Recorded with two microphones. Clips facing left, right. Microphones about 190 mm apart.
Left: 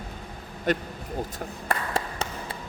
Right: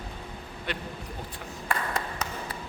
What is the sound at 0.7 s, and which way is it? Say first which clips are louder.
Speech: left 10 dB; 45° left (ahead or behind).